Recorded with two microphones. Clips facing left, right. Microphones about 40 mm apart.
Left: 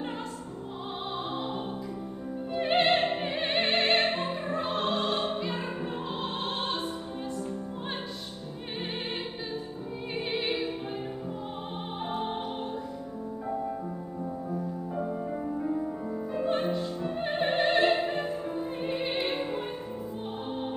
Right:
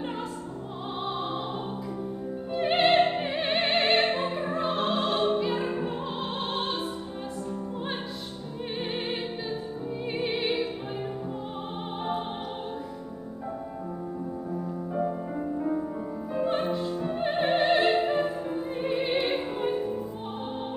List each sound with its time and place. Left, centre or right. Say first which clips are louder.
1.0 s music: right 3 dB; centre
2.5 s music: right 3 dB; centre
10.1 s opera: right 2 dB; centre
12.0 s music: right 2 dB; centre
16.3 s opera: right 2 dB; centre